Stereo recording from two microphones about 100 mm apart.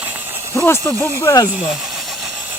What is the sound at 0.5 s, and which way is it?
Speech, 30° left (ahead or behind).